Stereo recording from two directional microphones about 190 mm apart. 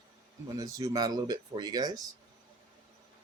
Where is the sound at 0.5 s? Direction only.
20° right (ahead or behind).